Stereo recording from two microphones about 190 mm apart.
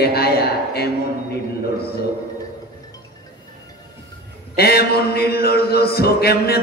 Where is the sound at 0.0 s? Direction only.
55° left (ahead or behind).